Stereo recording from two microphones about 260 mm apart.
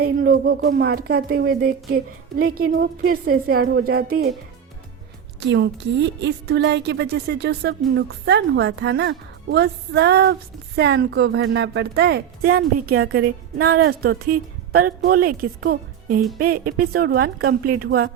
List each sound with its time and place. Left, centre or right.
0.0 s a woman's voice: right
5.4 s a woman's voice: right